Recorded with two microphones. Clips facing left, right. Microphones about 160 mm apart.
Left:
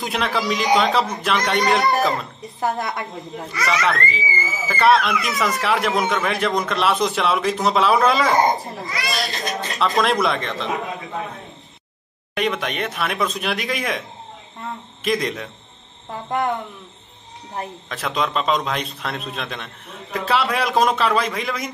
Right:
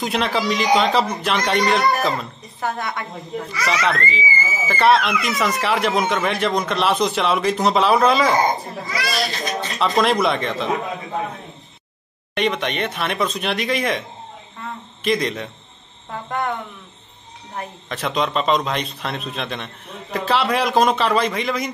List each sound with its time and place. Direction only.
0.0 s speech: centre (ahead or behind)
3.5 s speech: centre (ahead or behind)
12.4 s speech: centre (ahead or behind)
15.0 s speech: centre (ahead or behind)
16.3 s speech: 20° left (ahead or behind)
17.8 s speech: centre (ahead or behind)